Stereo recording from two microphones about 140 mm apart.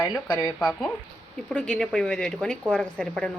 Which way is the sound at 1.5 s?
5° left (ahead or behind).